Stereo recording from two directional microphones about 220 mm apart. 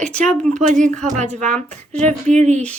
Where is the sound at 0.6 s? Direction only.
35° right (ahead or behind).